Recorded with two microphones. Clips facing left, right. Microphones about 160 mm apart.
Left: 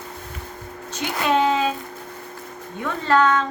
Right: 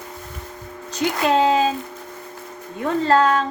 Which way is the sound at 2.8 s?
35° right (ahead or behind).